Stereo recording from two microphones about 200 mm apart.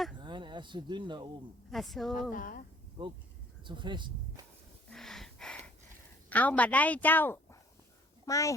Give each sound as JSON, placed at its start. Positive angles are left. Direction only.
{"t": 0.2, "sound": "speech", "side_deg": -25}
{"t": 1.7, "sound": "speech", "side_deg": 0}
{"t": 2.3, "sound": "speech", "side_deg": 45}
{"t": 3.0, "sound": "speech", "side_deg": -25}
{"t": 4.9, "sound": "gasp", "side_deg": 0}
{"t": 6.3, "sound": "speech", "side_deg": 10}